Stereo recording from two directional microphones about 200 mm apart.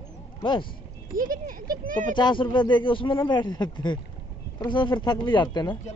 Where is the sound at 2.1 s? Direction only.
25° left (ahead or behind).